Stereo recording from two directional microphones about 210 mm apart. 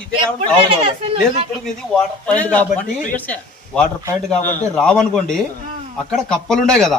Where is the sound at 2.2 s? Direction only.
5° left (ahead or behind).